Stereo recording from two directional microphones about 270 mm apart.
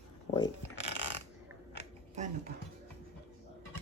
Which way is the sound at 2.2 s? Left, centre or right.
Right.